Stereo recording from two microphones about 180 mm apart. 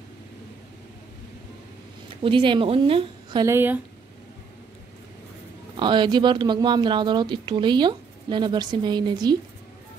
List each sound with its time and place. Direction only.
2.2 s speech: 25° right (ahead or behind)
3.5 s speech: 10° right (ahead or behind)
5.8 s speech: 25° right (ahead or behind)